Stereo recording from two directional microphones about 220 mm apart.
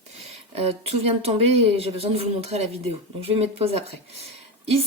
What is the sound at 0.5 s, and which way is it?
Speech, 25° right (ahead or behind).